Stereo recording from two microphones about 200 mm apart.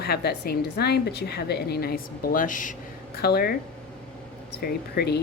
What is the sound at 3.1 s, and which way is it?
Speech, 50° left (ahead or behind).